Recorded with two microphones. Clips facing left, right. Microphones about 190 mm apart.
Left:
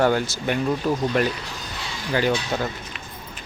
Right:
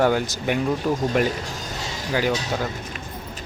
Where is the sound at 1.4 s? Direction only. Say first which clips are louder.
Right 3 dB; 45° right (ahead or behind).